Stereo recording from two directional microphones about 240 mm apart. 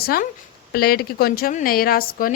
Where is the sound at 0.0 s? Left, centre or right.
Left.